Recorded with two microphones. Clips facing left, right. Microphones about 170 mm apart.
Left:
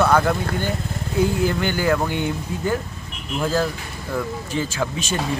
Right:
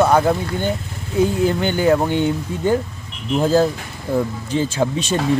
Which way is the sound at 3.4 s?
35° right (ahead or behind).